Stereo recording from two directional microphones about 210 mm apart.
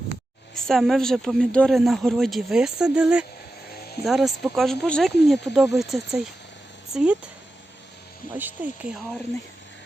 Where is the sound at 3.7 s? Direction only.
50° left (ahead or behind).